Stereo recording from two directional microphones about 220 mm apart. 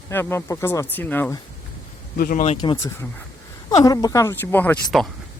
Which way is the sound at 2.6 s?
15° left (ahead or behind).